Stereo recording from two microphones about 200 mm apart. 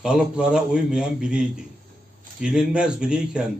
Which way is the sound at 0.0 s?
5° right (ahead or behind).